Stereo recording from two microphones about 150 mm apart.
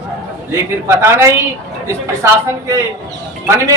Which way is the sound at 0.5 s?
15° right (ahead or behind).